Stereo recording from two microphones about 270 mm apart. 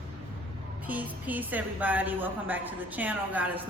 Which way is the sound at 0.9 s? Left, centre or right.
Centre.